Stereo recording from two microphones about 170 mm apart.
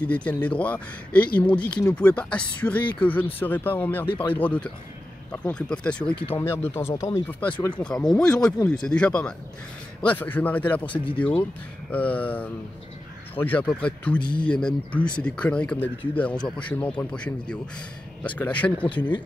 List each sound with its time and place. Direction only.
0.0 s speech: 10° left (ahead or behind)
4.1 s speech: 30° left (ahead or behind)
4.4 s speech: 10° left (ahead or behind)
10.9 s speech: 30° left (ahead or behind)
11.9 s speech: 10° left (ahead or behind)